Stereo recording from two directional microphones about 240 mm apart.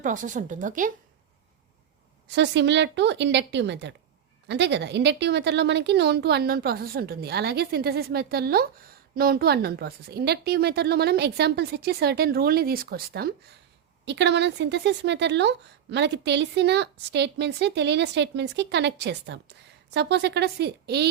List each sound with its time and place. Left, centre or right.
0.0 s a woman's voice: right
2.3 s a woman's voice: right